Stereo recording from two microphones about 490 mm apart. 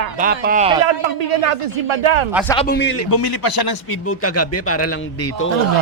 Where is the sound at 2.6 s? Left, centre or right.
Centre.